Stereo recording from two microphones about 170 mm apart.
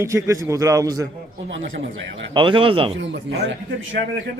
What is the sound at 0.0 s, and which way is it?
A man's voice, 15° right (ahead or behind).